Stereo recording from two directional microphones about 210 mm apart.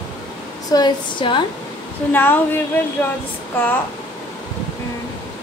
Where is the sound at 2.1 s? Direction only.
10° left (ahead or behind).